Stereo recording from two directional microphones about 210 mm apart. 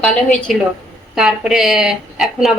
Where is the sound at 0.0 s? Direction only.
5° left (ahead or behind).